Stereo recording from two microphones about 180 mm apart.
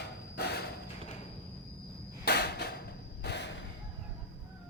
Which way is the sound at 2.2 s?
65° left (ahead or behind).